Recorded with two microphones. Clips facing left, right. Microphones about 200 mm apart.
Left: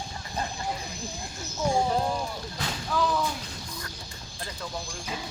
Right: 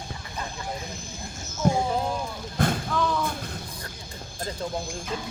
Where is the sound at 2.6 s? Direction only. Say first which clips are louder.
Right 12 dB; 55° right (ahead or behind).